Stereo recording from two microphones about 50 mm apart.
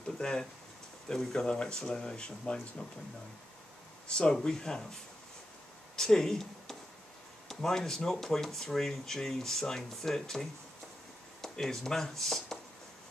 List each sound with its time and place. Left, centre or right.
0.2 s speech: centre
4.1 s speech: centre
5.9 s speech: centre